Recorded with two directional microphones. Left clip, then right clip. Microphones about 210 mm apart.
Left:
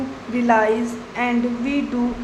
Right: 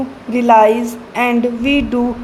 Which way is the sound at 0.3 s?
30° right (ahead or behind).